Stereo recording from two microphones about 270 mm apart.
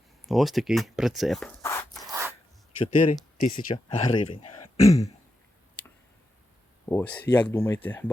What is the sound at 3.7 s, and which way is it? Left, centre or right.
Speech, left.